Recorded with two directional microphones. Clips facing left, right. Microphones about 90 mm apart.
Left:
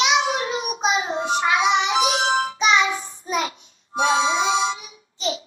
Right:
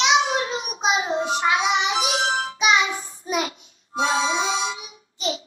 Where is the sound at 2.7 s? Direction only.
40° left (ahead or behind).